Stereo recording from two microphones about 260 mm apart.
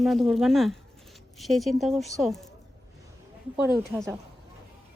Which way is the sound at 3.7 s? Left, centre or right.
Centre.